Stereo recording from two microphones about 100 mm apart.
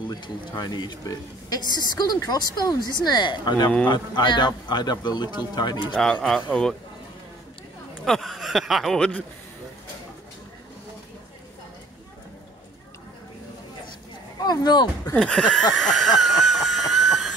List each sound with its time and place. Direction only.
0.1 s speech: 45° left (ahead or behind)
8.0 s speech: centre (ahead or behind)
14.4 s speech: 45° left (ahead or behind)
15.1 s a sound: 5° left (ahead or behind)